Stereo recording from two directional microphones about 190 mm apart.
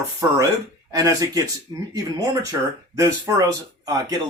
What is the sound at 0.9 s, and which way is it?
Speech, 20° right (ahead or behind).